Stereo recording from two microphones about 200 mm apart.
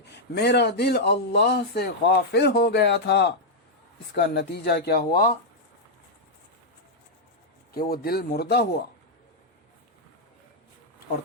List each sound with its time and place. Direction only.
0.0 s a man's voice: 55° left (ahead or behind)
7.7 s speech: 50° left (ahead or behind)